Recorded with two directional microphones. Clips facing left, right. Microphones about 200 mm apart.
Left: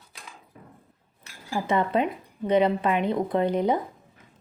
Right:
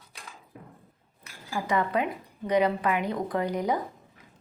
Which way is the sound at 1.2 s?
25° left (ahead or behind).